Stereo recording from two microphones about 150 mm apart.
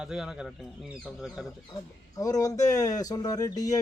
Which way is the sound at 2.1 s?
25° left (ahead or behind).